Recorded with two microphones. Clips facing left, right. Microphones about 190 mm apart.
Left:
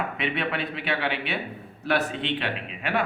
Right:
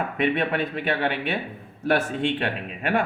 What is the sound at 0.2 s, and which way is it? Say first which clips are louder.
A man's voice: right 8 dB; 45° right (ahead or behind).